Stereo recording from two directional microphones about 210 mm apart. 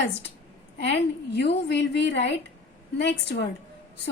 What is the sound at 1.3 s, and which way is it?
A woman's voice, 55° left (ahead or behind).